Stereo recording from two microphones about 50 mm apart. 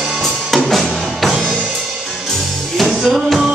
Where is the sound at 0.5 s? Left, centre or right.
Centre.